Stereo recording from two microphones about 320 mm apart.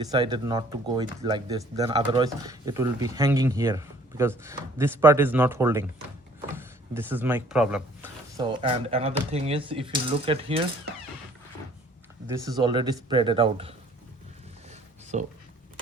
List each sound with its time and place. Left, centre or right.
0.0 s speech: centre
12.3 s speech: centre
15.1 s speech: right